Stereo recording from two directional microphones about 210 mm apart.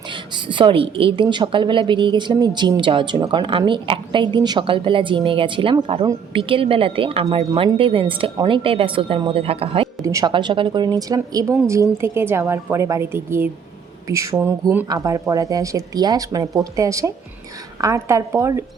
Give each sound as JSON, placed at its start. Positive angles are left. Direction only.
{"t": 0.1, "sound": "a woman's voice", "side_deg": -25}
{"t": 10.0, "sound": "speech", "side_deg": -15}